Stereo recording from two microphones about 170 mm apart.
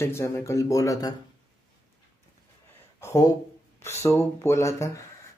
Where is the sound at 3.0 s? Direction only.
20° left (ahead or behind).